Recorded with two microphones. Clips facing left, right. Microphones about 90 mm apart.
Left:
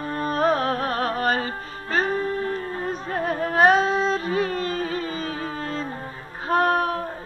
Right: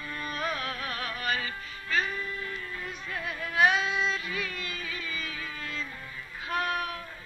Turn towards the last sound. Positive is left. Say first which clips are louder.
# left 10 dB
turn(degrees=40)  # may be behind; listen again after turning